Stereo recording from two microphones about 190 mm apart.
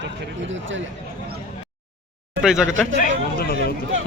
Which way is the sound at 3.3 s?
55° left (ahead or behind).